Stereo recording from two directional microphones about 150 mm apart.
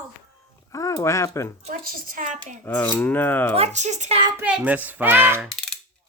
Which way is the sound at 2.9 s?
10° left (ahead or behind).